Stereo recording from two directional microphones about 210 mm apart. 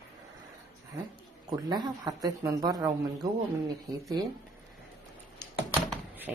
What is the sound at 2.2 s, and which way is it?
Speech, 20° right (ahead or behind).